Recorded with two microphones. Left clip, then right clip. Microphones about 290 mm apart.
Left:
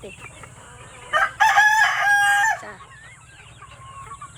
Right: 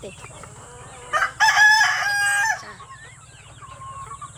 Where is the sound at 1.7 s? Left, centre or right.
Centre.